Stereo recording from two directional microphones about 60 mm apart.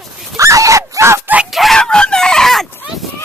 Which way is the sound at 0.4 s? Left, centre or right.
Right.